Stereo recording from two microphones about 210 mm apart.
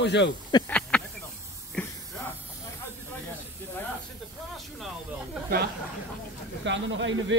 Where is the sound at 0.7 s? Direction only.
5° left (ahead or behind).